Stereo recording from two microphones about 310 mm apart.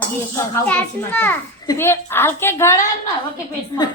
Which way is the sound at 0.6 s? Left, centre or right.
Centre.